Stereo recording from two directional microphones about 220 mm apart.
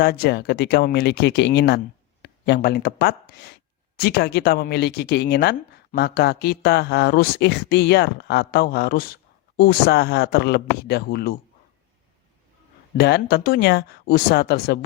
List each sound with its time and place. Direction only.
0.0 s speech: 45° left (ahead or behind)
13.0 s speech: 45° left (ahead or behind)